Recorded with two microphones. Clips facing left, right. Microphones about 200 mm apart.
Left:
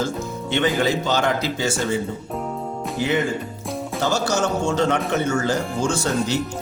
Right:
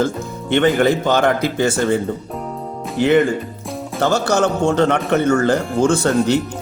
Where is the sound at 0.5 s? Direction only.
55° right (ahead or behind).